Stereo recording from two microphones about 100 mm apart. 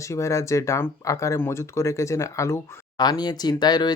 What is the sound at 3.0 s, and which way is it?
Speech, 45° left (ahead or behind).